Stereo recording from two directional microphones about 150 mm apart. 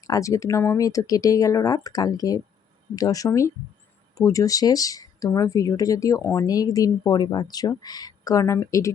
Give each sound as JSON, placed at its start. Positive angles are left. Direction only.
{"t": 0.1, "sound": "speech", "side_deg": 20}